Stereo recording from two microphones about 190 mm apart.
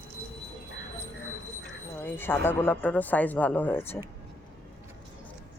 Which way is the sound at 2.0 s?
10° left (ahead or behind).